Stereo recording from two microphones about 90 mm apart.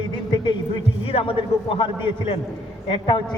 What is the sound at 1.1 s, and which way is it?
A man's voice, 90° left.